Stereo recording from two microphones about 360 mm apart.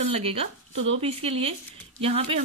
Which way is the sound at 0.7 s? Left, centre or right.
Right.